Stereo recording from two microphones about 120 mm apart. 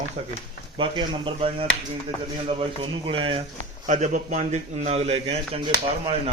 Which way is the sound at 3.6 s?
85° right.